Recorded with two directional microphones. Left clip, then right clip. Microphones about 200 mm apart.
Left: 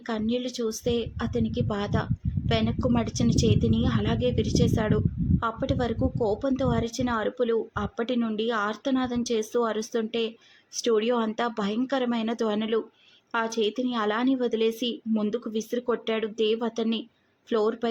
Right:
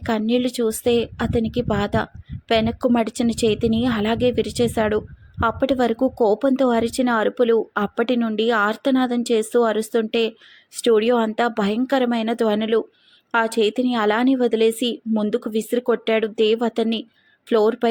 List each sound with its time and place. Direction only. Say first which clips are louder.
0.0 s speech: right 8 dB; 25° right (ahead or behind)